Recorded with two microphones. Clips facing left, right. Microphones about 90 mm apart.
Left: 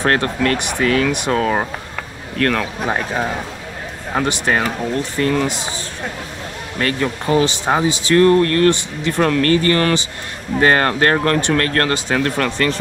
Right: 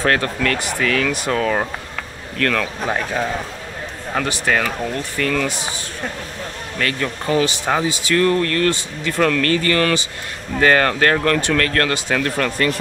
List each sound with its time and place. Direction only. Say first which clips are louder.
0.0 s speech: left 2 dB; 30° left (ahead or behind)
6.8 s speech: left 3 dB; 30° left (ahead or behind)